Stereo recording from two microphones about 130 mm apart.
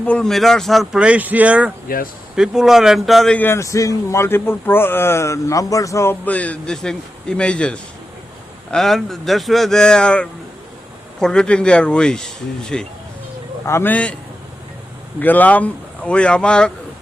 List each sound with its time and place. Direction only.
0.0 s speech: 5° left (ahead or behind)
3.3 s a man's voice: 15° left (ahead or behind)
13.7 s a man's voice: 15° left (ahead or behind)
15.2 s a man's voice: 15° left (ahead or behind)